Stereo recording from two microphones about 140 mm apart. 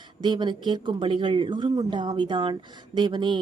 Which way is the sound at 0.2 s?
35° right (ahead or behind).